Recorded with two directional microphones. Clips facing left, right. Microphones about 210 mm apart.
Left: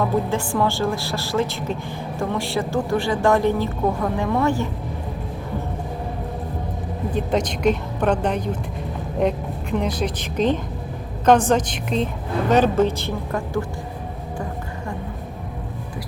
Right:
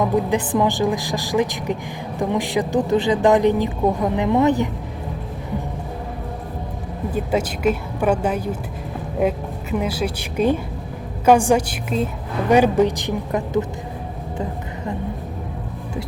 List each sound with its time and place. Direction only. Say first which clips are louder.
0.0 s a woman's voice: right 2 dB; 15° right (ahead or behind)
7.1 s a woman's voice: right 1 dB; 5° right (ahead or behind)